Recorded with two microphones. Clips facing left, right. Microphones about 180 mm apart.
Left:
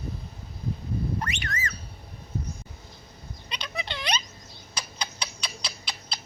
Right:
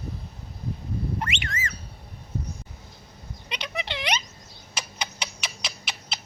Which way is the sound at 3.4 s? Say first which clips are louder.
Right 3 dB; 20° right (ahead or behind).